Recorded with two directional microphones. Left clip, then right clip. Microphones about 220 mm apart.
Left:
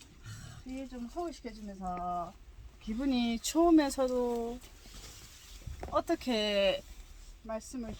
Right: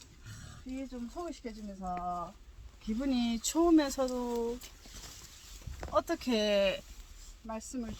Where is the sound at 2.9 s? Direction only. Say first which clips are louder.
Left 1 dB; 15° left (ahead or behind).